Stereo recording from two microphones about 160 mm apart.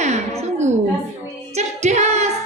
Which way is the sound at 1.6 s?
45° right (ahead or behind).